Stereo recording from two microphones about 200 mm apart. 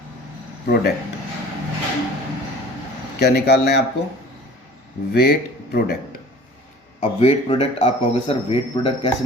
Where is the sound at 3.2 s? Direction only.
55° left (ahead or behind).